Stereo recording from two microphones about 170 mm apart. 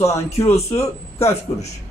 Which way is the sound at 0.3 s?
20° left (ahead or behind).